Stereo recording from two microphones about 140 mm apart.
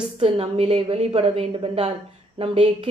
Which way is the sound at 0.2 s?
45° right (ahead or behind).